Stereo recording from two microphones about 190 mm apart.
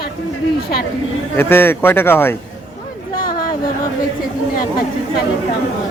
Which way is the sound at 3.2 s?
50° left (ahead or behind).